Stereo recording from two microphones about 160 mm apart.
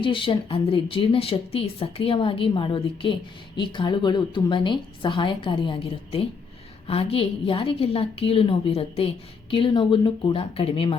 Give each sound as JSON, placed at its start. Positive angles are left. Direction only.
{"t": 0.0, "sound": "speech", "side_deg": 30}